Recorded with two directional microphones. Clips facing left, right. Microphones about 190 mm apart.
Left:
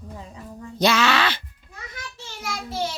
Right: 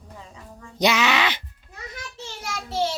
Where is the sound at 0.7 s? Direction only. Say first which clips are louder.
Left 1 dB; 15° right (ahead or behind).